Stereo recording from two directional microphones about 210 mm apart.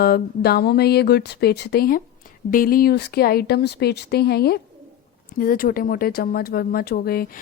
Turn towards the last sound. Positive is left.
turn(degrees=45)  # may be behind; listen again after turning